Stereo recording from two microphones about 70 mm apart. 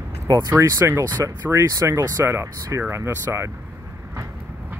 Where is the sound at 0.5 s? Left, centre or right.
Right.